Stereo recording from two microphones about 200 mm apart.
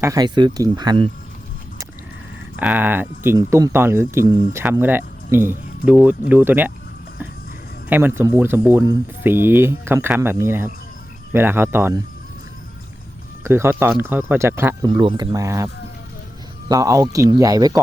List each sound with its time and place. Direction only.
0.0 s speech: 20° right (ahead or behind)
2.6 s speech: 10° right (ahead or behind)
7.9 s speech: 10° right (ahead or behind)
13.4 s speech: 10° right (ahead or behind)